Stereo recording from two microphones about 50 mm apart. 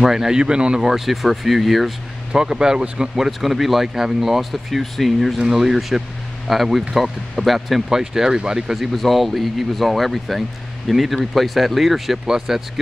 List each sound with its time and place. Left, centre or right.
0.0 s speech: centre
2.3 s speech: centre
3.3 s speech: centre
8.7 s speech: centre